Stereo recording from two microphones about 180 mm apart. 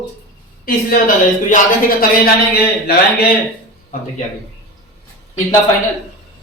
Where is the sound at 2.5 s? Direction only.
60° left (ahead or behind).